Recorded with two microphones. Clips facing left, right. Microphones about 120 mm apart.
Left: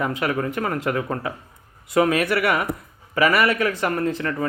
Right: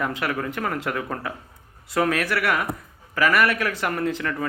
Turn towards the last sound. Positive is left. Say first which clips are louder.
# left 2 dB
turn(degrees=5)  # may be behind; listen again after turning